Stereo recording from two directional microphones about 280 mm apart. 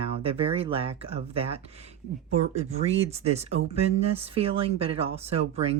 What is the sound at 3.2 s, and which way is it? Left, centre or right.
Speech, right.